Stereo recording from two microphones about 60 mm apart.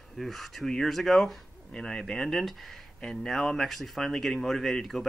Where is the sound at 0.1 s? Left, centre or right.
Centre.